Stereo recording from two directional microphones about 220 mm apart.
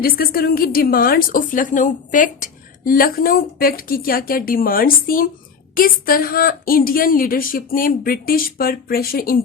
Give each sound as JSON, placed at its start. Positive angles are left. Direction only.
{"t": 0.0, "sound": "a woman's voice", "side_deg": 45}